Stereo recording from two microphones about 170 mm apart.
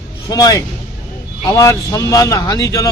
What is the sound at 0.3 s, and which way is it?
Speech, 20° left (ahead or behind).